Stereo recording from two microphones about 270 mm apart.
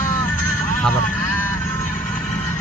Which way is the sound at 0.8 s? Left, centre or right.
Centre.